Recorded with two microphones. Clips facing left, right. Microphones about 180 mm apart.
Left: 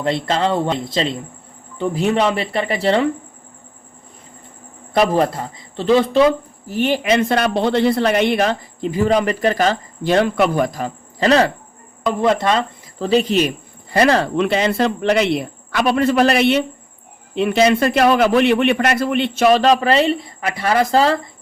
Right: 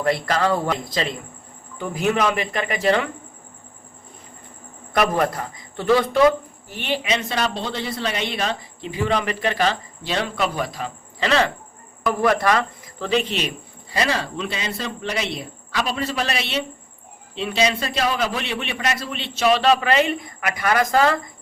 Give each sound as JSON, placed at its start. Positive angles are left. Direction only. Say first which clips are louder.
{"t": 0.0, "sound": "speech", "louder": "left 2 dB", "side_deg": 25}
{"t": 4.9, "sound": "speech", "louder": "left 4 dB", "side_deg": 30}
{"t": 6.7, "sound": "speech", "louder": "left 7 dB", "side_deg": 40}
{"t": 12.0, "sound": "speech", "louder": "left 2 dB", "side_deg": 25}
{"t": 13.9, "sound": "speech", "louder": "left 9 dB", "side_deg": 60}